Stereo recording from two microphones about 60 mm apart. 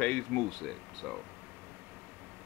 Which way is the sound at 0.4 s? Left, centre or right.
Centre.